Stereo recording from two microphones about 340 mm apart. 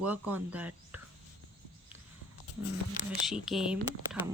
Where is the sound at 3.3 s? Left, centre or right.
Centre.